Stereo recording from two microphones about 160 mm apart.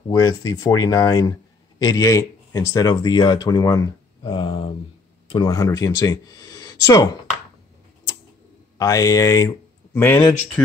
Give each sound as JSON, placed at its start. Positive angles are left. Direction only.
{"t": 0.1, "sound": "speech", "side_deg": 20}
{"t": 4.3, "sound": "speech", "side_deg": 35}
{"t": 8.7, "sound": "speech", "side_deg": 20}